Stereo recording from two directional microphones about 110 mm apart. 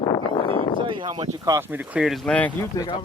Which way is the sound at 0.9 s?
45° right (ahead or behind).